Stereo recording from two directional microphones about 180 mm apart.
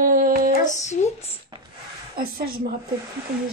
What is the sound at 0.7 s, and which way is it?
Speech, 40° left (ahead or behind).